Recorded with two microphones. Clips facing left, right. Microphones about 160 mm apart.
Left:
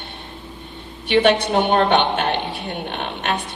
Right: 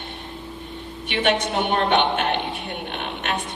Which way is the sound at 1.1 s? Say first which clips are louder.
Left 6 dB; 35° left (ahead or behind).